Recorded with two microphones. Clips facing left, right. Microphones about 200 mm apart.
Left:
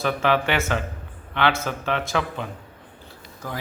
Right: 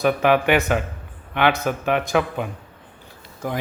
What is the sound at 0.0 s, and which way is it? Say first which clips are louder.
Speech: right 4 dB; 15° right (ahead or behind).